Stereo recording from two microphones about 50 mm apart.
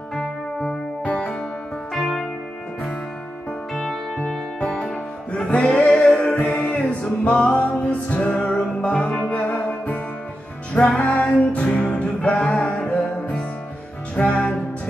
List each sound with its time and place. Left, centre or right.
0.1 s music: centre
1.0 s music: left
2.0 s music: centre
3.7 s music: centre
4.6 s music: left